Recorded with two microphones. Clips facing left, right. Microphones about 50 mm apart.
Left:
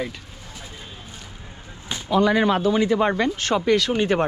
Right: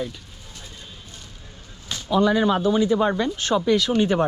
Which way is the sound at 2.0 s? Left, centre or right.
Left.